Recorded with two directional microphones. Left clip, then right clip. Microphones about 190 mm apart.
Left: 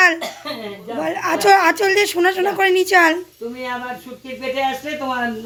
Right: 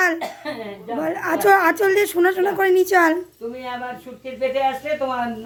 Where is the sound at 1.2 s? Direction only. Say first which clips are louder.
Left 2 dB; 15° right (ahead or behind).